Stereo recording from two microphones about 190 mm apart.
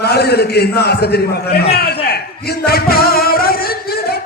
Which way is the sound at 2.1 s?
55° left (ahead or behind).